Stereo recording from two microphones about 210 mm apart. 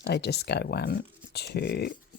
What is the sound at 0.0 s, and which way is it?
Speech, 50° left (ahead or behind).